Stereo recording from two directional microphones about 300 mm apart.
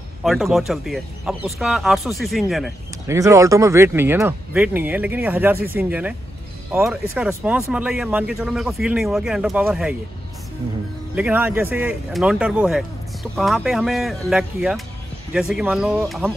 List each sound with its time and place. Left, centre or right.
0.2 s speech: centre
11.1 s speech: centre